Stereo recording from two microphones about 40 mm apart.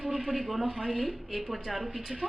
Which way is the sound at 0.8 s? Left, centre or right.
Centre.